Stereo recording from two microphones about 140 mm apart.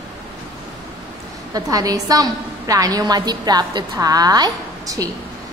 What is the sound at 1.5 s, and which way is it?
A woman's voice, 25° right (ahead or behind).